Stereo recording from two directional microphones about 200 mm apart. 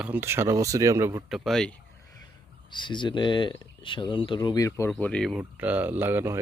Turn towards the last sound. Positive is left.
turn(degrees=-10)  # may be behind; listen again after turning